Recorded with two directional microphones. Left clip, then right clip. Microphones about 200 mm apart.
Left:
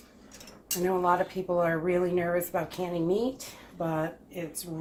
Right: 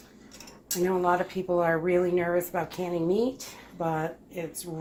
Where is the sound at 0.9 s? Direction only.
30° right (ahead or behind).